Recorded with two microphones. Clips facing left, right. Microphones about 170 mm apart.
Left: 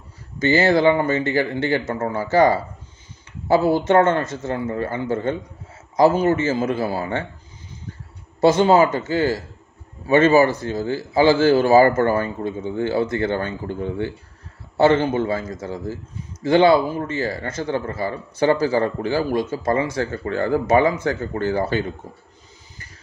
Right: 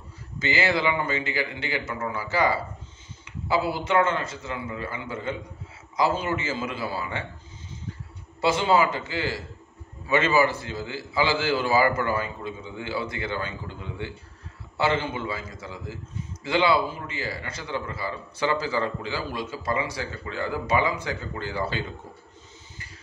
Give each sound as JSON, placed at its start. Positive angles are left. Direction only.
{"t": 0.5, "sound": "a man's voice", "side_deg": 45}
{"t": 6.4, "sound": "a man's voice", "side_deg": 45}
{"t": 8.4, "sound": "a man's voice", "side_deg": 45}